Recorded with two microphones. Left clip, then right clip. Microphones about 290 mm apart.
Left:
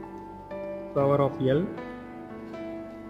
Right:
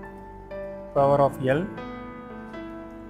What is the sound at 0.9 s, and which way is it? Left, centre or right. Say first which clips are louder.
Music: right 4 dB; right.